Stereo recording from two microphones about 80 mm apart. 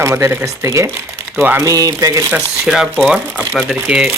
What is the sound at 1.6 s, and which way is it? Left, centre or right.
Speech, right.